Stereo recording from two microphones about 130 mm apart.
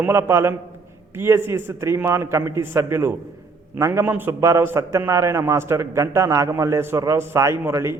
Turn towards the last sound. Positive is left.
turn(degrees=-20)  # may be behind; listen again after turning